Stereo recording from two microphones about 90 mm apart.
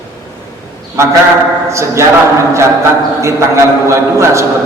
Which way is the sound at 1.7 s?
35° right (ahead or behind).